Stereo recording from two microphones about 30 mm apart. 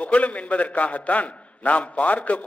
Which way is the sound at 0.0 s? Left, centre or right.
Left.